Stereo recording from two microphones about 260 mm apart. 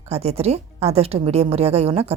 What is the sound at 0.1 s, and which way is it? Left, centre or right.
A woman's voice, right.